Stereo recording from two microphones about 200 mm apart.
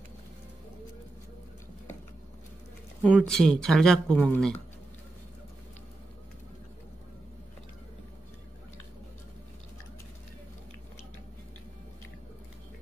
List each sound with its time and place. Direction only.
3.0 s speech: centre (ahead or behind)